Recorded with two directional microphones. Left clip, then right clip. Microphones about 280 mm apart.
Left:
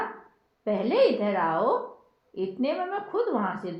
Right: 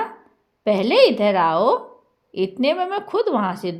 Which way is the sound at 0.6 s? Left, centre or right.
Right.